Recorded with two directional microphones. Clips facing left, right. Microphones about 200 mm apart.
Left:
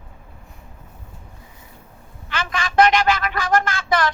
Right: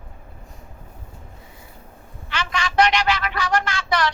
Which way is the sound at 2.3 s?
50° left (ahead or behind).